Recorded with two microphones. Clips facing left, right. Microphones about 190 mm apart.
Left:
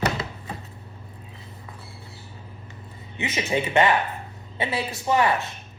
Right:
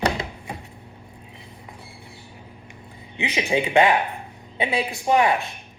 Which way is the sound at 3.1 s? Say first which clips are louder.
Right 2 dB; 15° right (ahead or behind).